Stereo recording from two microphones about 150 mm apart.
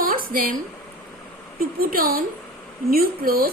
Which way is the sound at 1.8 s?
75° right (ahead or behind).